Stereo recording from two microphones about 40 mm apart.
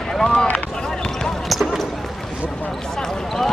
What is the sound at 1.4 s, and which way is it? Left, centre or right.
Basketball bounce, centre.